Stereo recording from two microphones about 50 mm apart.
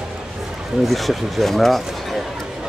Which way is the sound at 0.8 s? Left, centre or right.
Centre.